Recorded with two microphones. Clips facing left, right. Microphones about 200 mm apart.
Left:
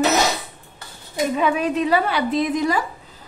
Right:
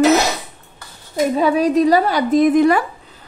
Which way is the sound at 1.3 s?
35° right (ahead or behind).